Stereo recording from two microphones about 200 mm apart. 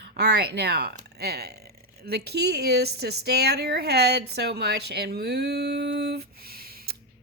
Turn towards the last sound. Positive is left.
turn(degrees=-55)  # may be behind; listen again after turning